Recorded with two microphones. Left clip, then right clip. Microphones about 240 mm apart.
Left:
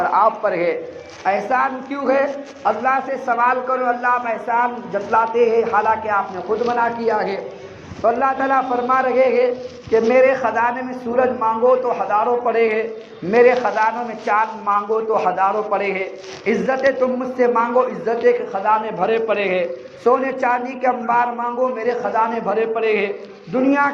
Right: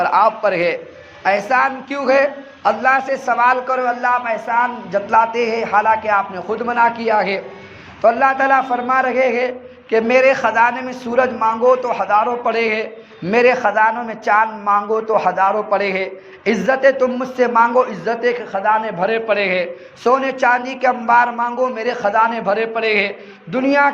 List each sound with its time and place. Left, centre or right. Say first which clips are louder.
0.0 s a man's voice: right 2 dB; right